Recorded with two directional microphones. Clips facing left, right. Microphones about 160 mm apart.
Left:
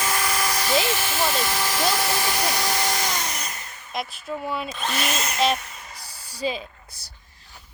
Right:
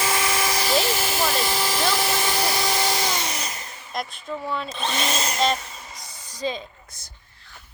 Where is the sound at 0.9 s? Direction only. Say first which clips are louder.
Right 1 dB; 40° right (ahead or behind).